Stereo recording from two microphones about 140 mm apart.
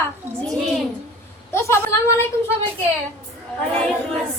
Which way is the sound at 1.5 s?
20° left (ahead or behind).